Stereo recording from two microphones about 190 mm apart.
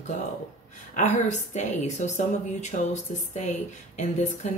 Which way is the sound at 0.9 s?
40° left (ahead or behind).